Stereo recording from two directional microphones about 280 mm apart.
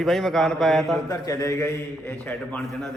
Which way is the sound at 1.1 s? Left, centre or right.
Centre.